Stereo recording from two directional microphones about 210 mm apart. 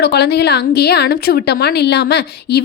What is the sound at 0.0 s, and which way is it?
A woman's voice, 50° left (ahead or behind).